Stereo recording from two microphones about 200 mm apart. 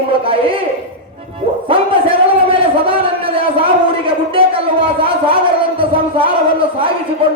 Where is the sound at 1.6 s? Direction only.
25° right (ahead or behind).